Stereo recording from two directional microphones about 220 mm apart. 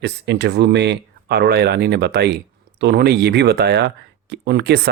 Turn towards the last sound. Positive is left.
turn(degrees=-50)  # may be behind; listen again after turning